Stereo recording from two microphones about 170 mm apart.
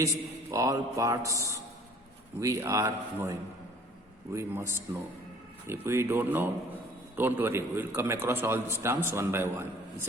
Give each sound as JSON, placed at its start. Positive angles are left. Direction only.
{"t": 0.0, "sound": "a man's voice", "side_deg": -20}
{"t": 4.4, "sound": "a man's voice", "side_deg": -15}